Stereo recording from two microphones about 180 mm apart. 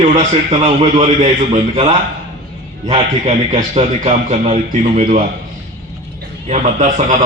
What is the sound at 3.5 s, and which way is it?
Speech, 40° right (ahead or behind).